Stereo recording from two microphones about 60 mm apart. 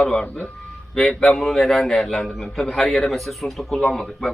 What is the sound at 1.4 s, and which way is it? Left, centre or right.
A man's voice, centre.